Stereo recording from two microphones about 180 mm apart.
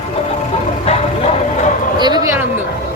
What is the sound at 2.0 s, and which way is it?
Speech, 20° right (ahead or behind).